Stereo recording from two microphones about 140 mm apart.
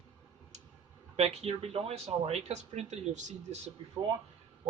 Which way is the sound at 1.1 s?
50° right (ahead or behind).